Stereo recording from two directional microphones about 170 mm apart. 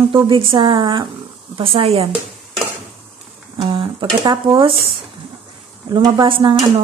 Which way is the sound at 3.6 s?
30° right (ahead or behind).